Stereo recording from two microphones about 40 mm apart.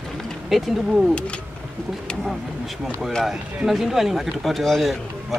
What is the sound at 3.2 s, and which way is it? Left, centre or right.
Speech, centre.